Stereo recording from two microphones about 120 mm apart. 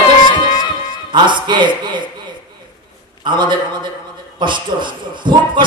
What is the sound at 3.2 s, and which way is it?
A man's voice, 40° right (ahead or behind).